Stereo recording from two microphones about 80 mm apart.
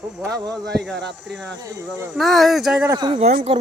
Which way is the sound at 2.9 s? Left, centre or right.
Right.